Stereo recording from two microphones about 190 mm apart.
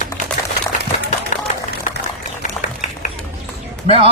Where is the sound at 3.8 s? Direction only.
30° right (ahead or behind).